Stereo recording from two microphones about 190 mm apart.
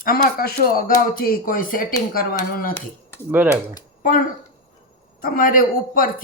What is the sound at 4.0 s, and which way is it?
Speech, 45° left (ahead or behind).